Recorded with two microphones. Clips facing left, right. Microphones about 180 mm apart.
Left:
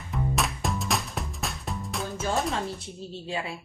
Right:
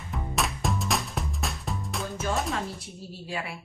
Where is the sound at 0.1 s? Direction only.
Centre (ahead or behind).